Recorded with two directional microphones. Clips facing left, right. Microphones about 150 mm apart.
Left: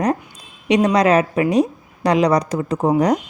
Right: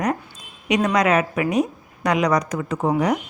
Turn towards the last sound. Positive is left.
turn(degrees=40)  # may be behind; listen again after turning